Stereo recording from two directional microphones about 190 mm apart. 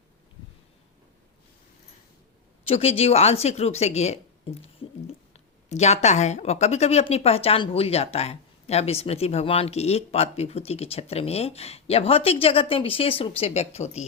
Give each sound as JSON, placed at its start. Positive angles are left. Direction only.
{"t": 2.6, "sound": "speech", "side_deg": 30}